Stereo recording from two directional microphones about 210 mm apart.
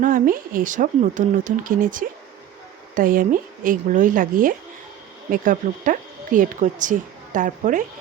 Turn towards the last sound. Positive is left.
turn(degrees=-40)  # may be behind; listen again after turning